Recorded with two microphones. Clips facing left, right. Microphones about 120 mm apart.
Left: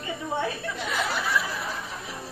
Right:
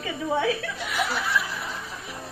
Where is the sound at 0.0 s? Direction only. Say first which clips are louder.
Right 4 dB; 90° right.